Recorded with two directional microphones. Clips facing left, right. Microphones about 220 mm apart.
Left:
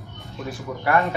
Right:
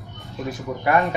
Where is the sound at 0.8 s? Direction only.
20° right (ahead or behind).